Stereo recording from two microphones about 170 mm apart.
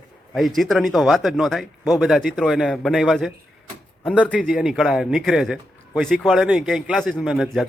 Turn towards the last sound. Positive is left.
turn(degrees=0)  # may be behind; listen again after turning